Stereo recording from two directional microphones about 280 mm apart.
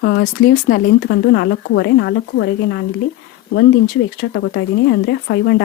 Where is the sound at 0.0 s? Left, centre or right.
Left.